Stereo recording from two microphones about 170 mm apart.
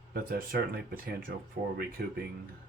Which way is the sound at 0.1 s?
60° right (ahead or behind).